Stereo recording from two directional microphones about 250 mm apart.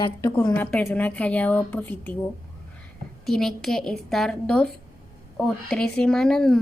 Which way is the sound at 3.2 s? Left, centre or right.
Centre.